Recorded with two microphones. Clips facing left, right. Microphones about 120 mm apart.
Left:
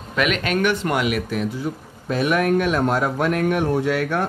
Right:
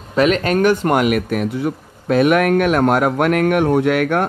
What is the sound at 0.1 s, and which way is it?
Speech, 35° right (ahead or behind).